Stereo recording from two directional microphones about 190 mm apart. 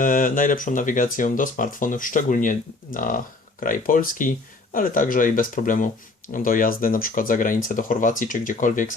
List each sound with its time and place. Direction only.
0.0 s speech: 45° left (ahead or behind)